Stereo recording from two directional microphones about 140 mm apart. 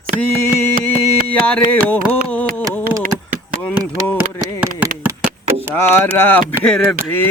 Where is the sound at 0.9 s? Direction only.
10° left (ahead or behind).